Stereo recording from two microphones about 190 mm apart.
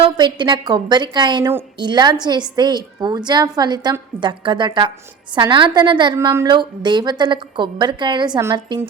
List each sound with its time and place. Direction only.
0.0 s a woman's voice: 25° right (ahead or behind)